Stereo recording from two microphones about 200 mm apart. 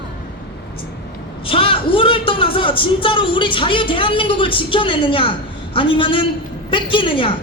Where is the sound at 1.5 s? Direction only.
25° left (ahead or behind).